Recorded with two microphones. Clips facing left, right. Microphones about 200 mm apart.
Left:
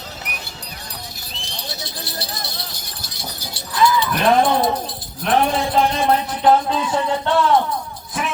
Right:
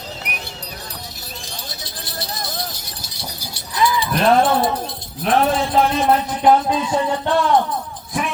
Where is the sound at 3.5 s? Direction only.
15° right (ahead or behind).